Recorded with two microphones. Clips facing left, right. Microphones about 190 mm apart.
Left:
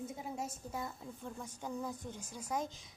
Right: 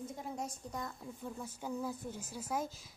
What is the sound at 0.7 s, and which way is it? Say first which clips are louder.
Speech: even; 5° left (ahead or behind).